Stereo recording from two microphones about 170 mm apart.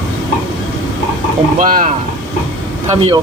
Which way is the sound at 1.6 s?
55° right (ahead or behind).